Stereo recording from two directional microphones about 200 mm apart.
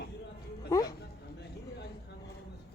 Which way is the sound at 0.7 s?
20° left (ahead or behind).